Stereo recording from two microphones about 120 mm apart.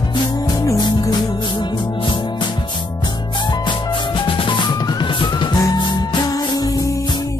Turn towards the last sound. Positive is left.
turn(degrees=30)  # may be behind; listen again after turning